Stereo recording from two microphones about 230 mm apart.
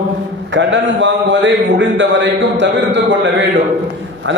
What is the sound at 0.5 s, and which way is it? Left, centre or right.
A man's voice, right.